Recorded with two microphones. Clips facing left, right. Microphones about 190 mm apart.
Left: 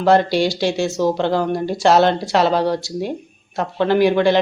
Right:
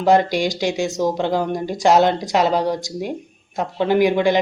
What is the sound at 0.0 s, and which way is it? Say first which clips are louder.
Speech: left 1 dB; 15° right (ahead or behind).